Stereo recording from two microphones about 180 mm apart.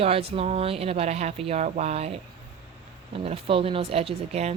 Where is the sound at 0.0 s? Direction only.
35° right (ahead or behind).